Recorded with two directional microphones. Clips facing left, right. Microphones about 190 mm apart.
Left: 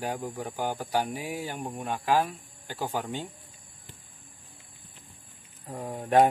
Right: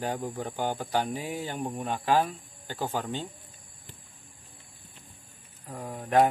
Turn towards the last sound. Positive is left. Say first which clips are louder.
# left 3 dB
turn(degrees=25)  # may be behind; listen again after turning